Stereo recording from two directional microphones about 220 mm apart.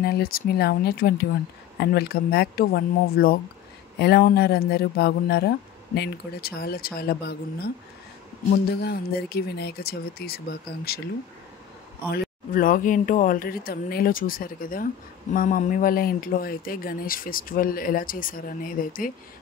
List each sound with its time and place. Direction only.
0.0 s speech: 45° left (ahead or behind)
8.7 s speech: 45° left (ahead or behind)
12.1 s speech: 40° left (ahead or behind)